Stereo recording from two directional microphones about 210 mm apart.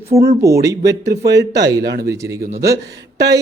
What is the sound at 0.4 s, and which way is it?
Speech, 15° right (ahead or behind).